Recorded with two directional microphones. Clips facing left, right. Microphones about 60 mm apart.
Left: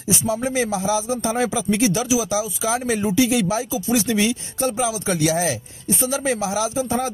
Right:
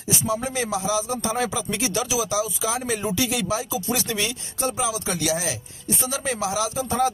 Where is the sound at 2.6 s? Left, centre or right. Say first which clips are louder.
Left 4 dB; left.